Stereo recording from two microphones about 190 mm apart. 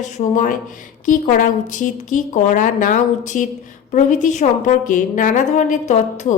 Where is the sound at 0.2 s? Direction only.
40° left (ahead or behind).